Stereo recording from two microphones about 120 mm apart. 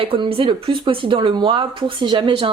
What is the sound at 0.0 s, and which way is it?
A woman's voice, 50° right (ahead or behind).